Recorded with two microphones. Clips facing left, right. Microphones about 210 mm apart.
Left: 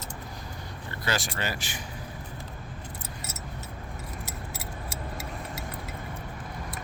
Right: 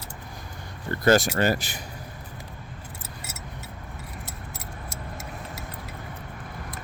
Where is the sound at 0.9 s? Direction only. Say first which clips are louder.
Right 12 dB; 45° right (ahead or behind).